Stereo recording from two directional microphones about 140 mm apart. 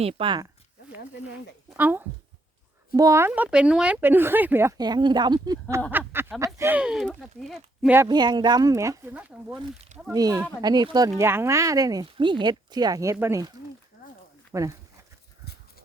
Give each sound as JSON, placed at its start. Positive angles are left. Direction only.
{"t": 0.0, "sound": "speech", "side_deg": -40}
{"t": 1.7, "sound": "speech", "side_deg": -15}
{"t": 4.8, "sound": "speech", "side_deg": -30}
{"t": 5.9, "sound": "a sound", "side_deg": -15}
{"t": 6.4, "sound": "speech", "side_deg": -20}
{"t": 6.7, "sound": "speech", "side_deg": -5}
{"t": 8.0, "sound": "speech", "side_deg": -30}
{"t": 10.1, "sound": "speech", "side_deg": -25}
{"t": 11.2, "sound": "speech", "side_deg": -20}
{"t": 14.5, "sound": "speech", "side_deg": -25}